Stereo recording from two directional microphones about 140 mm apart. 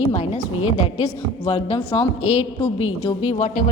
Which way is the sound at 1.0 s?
45° left (ahead or behind).